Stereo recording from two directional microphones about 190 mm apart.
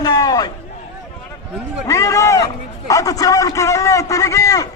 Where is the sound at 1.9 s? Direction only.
15° left (ahead or behind).